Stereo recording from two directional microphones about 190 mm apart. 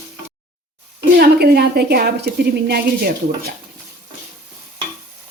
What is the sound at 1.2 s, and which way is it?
Speech, 55° right (ahead or behind).